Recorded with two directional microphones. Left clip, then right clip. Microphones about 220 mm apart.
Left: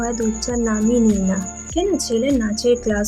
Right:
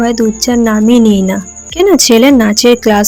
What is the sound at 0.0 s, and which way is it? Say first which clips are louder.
A woman's voice: right 11 dB; 35° right (ahead or behind).